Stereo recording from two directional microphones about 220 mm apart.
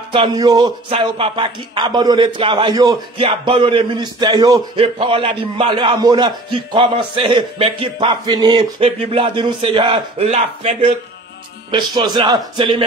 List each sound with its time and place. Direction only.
0.1 s speech: 20° right (ahead or behind)
11.7 s speech: 20° right (ahead or behind)